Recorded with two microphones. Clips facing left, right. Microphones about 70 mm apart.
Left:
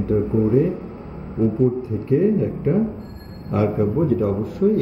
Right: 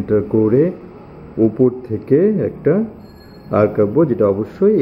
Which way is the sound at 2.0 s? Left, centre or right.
Right.